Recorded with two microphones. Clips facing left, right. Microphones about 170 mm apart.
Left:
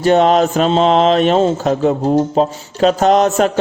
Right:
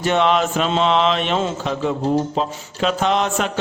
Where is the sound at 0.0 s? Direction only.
40° left (ahead or behind).